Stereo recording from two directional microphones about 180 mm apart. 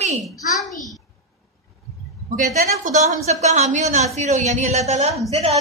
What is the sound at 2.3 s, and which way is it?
A woman's voice, 45° right (ahead or behind).